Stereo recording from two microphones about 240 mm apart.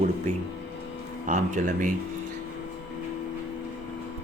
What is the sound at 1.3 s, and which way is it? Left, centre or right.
Speech, right.